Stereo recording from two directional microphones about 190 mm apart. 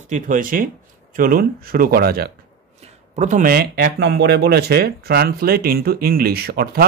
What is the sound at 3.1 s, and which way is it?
Speech, 40° right (ahead or behind).